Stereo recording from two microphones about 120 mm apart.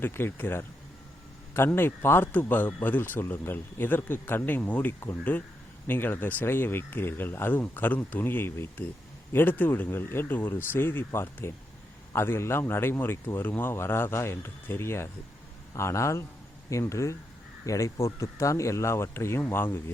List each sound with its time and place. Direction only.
0.0 s speech: 20° left (ahead or behind)